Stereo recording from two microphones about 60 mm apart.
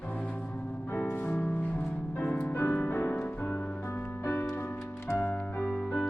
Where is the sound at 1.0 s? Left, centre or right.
Left.